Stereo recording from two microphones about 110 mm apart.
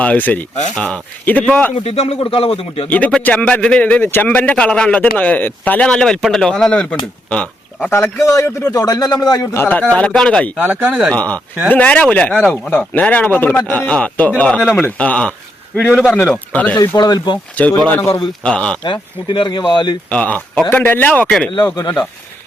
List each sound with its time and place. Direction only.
0.0 s a man's voice: 15° left (ahead or behind)
1.7 s speech: 65° left (ahead or behind)
3.1 s a man's voice: 10° left (ahead or behind)
7.3 s a sound: 10° left (ahead or behind)
7.9 s a man's voice: 20° left (ahead or behind)
9.6 s a man's voice: 15° left (ahead or behind)
10.6 s speech: 10° right (ahead or behind)
11.1 s a man's voice: 15° left (ahead or behind)
17.0 s speech: 35° left (ahead or behind)
17.8 s a man's voice: 15° left (ahead or behind)
18.8 s speech: 45° left (ahead or behind)
20.1 s a man's voice: 10° left (ahead or behind)
21.5 s speech: 35° left (ahead or behind)